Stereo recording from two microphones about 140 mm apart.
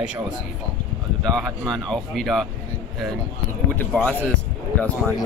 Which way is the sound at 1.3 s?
5° left (ahead or behind).